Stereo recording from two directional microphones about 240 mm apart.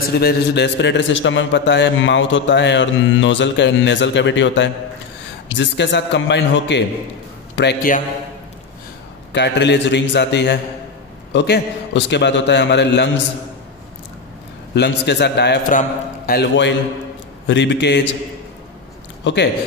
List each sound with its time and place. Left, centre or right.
0.2 s a man's voice: left
9.3 s a man's voice: left
14.7 s a man's voice: left
19.2 s speech: left